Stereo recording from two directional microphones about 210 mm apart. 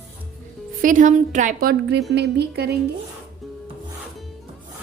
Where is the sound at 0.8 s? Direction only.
40° right (ahead or behind).